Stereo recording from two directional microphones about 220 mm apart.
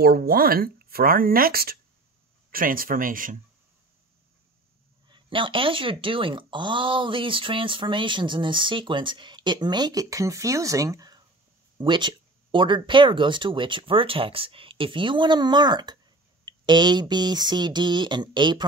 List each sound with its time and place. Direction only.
0.0 s speech: 45° right (ahead or behind)
5.1 s speech: 20° right (ahead or behind)